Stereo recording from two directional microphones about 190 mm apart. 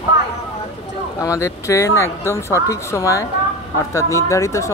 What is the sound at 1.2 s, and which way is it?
Speech, 15° left (ahead or behind).